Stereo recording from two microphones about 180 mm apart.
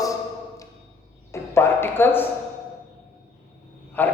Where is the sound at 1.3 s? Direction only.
15° left (ahead or behind).